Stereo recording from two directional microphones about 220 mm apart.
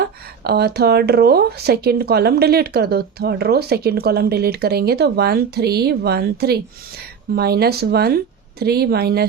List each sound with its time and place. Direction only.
0.0 s speech: 45° right (ahead or behind)